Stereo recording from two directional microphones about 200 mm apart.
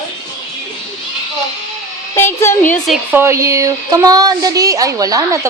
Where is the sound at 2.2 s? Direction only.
15° left (ahead or behind).